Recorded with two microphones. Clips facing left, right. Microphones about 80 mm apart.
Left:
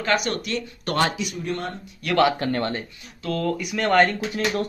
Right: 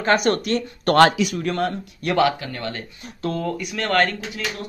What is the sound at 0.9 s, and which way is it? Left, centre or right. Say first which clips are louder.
Speech: right 8 dB; right.